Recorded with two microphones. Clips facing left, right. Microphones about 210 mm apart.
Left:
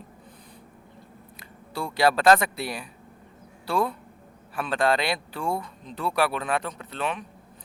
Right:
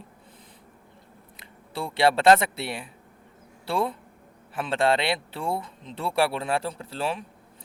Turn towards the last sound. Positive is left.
turn(degrees=-30)  # may be behind; listen again after turning